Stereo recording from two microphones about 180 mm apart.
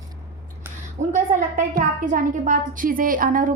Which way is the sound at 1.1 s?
45° right (ahead or behind).